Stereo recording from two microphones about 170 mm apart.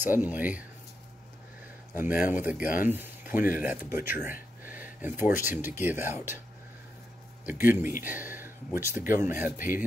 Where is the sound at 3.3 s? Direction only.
55° left (ahead or behind).